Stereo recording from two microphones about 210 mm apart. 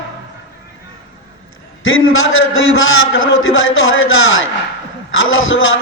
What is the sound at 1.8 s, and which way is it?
A man's voice, 75° left (ahead or behind).